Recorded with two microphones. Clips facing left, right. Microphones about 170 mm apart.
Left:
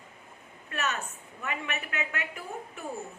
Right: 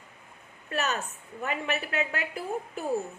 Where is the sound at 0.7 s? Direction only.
35° right (ahead or behind).